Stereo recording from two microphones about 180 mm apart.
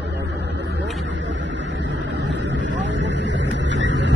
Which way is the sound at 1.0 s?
90° right.